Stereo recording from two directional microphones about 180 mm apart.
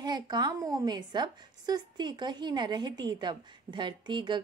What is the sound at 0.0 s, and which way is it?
A woman's voice, 25° right (ahead or behind).